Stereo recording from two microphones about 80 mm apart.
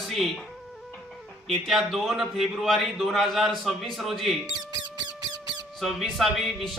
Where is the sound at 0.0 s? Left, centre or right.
Centre.